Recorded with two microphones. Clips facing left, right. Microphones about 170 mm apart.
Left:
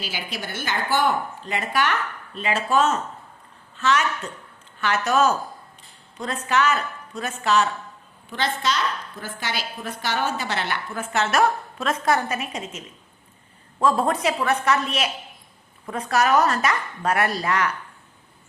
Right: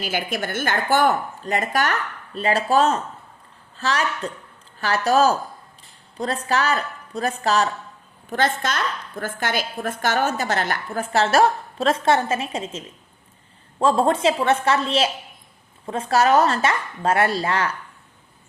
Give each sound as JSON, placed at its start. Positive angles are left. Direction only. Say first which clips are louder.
{"t": 0.0, "sound": "a woman's voice", "louder": "right 7 dB", "side_deg": -50}
{"t": 8.3, "sound": "a woman's voice", "louder": "right 3 dB", "side_deg": -50}